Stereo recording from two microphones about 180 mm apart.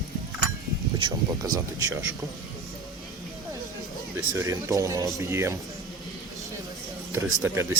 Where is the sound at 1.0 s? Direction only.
20° right (ahead or behind).